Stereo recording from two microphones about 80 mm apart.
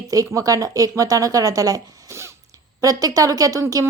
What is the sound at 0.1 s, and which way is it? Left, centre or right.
Speech, right.